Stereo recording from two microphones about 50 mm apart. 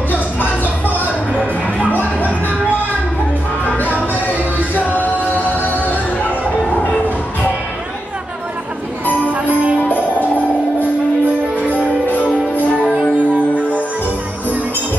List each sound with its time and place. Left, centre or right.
2.0 s music: left
3.6 s music: left
6.7 s train: left
9.3 s jingle bell: right
11.7 s music: left
12.8 s music: right